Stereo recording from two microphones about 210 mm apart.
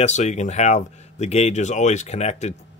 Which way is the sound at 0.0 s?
35° left (ahead or behind).